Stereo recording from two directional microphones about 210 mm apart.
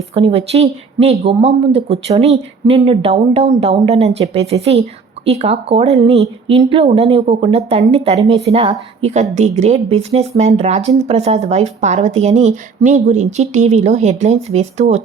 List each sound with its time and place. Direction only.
0.1 s speech: 30° right (ahead or behind)